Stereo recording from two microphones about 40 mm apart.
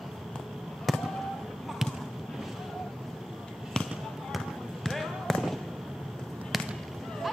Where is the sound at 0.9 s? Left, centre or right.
Centre.